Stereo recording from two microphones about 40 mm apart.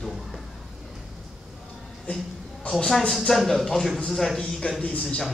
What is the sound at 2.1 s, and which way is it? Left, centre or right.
Speech, left.